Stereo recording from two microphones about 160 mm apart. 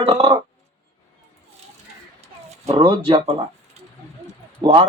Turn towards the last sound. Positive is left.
turn(degrees=-30)  # may be behind; listen again after turning